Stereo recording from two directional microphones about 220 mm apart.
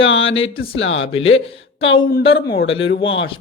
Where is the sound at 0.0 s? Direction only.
60° left (ahead or behind).